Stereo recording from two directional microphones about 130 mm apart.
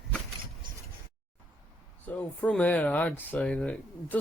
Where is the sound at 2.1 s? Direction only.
10° left (ahead or behind).